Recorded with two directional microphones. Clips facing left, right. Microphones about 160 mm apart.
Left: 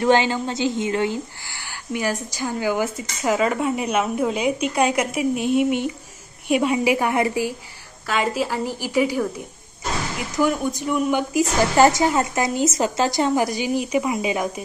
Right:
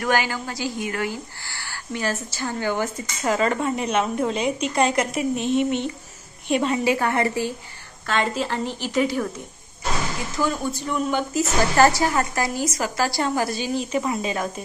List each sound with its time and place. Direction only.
0.0 s a woman's voice: 25° left (ahead or behind); by 9.3 s 10° left (ahead or behind)
10.3 s a woman's voice: 15° left (ahead or behind)